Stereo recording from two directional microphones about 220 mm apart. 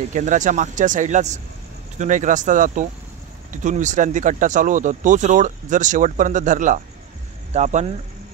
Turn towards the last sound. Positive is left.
turn(degrees=-30)  # may be behind; listen again after turning